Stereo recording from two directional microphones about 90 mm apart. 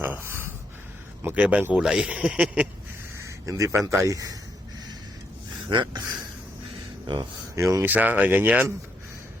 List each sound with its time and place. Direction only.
0.0 s a sound: 25° right (ahead or behind)
1.2 s speech: 20° right (ahead or behind)
3.2 s speech: 35° right (ahead or behind)
5.6 s speech: 60° right (ahead or behind)
7.5 s speech: 35° right (ahead or behind)
7.9 s speech: 20° right (ahead or behind)